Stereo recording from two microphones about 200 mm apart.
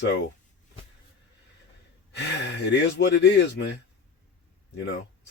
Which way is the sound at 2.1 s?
60° left (ahead or behind).